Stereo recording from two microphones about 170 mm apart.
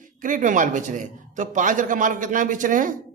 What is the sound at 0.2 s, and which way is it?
A man's voice, 50° right (ahead or behind).